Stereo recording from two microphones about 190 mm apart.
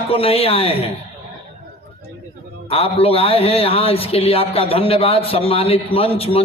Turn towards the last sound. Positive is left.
turn(degrees=30)  # may be behind; listen again after turning